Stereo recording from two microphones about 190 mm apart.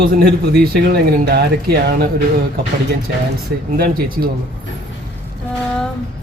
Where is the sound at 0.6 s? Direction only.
55° right (ahead or behind).